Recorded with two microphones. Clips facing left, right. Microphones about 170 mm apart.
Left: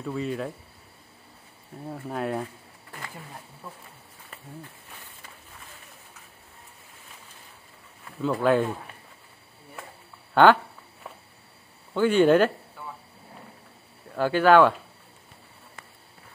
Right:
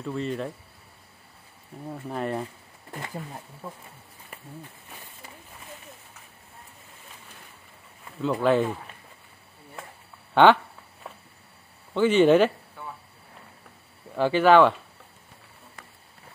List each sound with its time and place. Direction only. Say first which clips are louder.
0.0 s speech: even; 5° left (ahead or behind)
1.9 s speech: even; 5° left (ahead or behind)
8.2 s speech: even; centre (ahead or behind)
10.3 s speech: even; 5° left (ahead or behind)
11.9 s speech: right 1 dB; 10° left (ahead or behind)
14.1 s speech: even; 5° left (ahead or behind)